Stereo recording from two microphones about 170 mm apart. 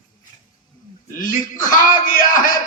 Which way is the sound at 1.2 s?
50° left (ahead or behind).